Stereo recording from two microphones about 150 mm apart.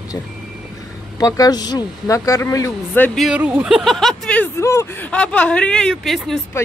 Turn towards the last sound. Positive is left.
turn(degrees=0)  # may be behind; listen again after turning